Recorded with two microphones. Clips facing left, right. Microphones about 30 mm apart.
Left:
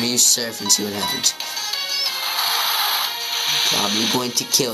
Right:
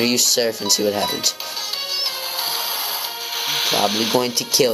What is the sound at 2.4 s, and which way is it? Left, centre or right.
Music, left.